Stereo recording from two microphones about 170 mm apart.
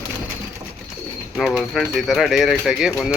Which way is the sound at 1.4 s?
Centre (ahead or behind).